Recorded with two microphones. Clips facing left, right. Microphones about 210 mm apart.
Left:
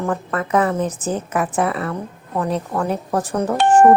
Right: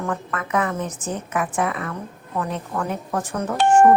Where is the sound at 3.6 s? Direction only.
5° left (ahead or behind).